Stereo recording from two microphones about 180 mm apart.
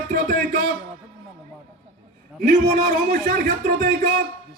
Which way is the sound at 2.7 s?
55° right (ahead or behind).